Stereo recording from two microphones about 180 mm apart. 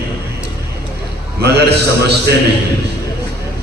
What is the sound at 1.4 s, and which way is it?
Speech, 65° right (ahead or behind).